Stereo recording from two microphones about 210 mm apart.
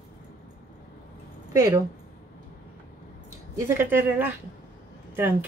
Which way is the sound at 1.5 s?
15° right (ahead or behind).